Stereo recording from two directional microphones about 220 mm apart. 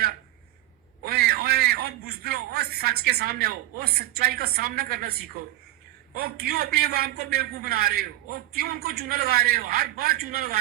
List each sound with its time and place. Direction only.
1.0 s a man's voice: 45° right (ahead or behind)